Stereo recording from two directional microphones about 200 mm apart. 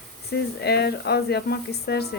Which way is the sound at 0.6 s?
55° left (ahead or behind).